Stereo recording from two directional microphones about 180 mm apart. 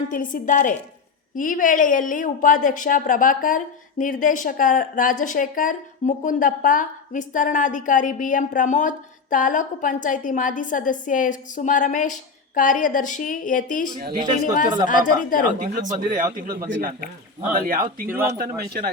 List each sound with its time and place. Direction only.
0.1 s speech: 50° left (ahead or behind)
15.5 s speech: 45° right (ahead or behind)
18.1 s speech: 10° right (ahead or behind)
18.3 s a man's voice: 60° right (ahead or behind)